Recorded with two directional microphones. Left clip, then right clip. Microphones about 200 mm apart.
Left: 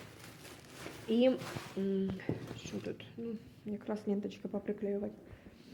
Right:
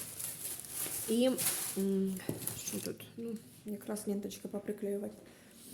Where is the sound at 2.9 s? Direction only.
35° right (ahead or behind).